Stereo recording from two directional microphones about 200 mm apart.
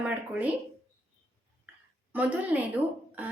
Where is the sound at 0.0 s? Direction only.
5° right (ahead or behind).